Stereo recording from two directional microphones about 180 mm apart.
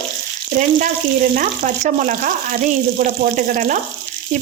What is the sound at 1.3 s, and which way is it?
Frying, 45° right (ahead or behind).